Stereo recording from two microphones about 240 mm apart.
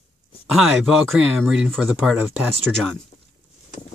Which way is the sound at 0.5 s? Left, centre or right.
Centre.